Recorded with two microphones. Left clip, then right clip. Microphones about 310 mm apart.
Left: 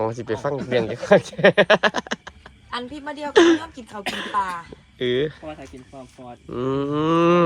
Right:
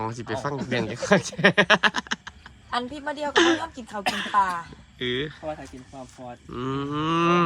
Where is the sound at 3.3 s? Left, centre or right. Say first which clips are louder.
Left 5 dB; centre.